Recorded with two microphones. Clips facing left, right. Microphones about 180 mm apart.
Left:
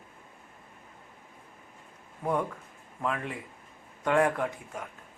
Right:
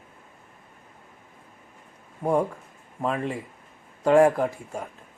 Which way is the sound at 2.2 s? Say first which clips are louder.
Right 6 dB; 30° right (ahead or behind).